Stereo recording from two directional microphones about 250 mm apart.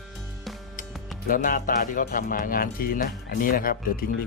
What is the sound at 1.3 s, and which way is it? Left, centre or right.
Speech, left.